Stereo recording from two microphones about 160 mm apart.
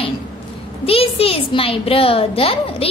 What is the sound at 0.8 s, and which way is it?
A woman's voice, 35° left (ahead or behind).